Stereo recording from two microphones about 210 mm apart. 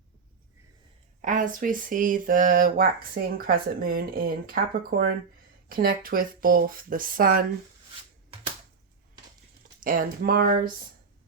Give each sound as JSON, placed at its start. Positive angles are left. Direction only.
{"t": 1.2, "sound": "speech", "side_deg": -40}
{"t": 9.8, "sound": "speech", "side_deg": -40}